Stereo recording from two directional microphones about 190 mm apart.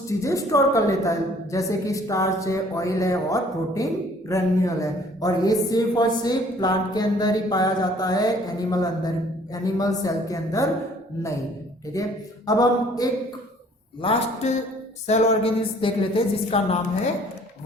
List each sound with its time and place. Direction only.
0.1 s a woman's voice: 15° left (ahead or behind)
11.9 s a woman's voice: 15° left (ahead or behind)